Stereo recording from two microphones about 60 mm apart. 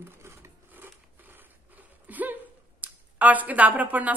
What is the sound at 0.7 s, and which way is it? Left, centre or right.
Scissors, right.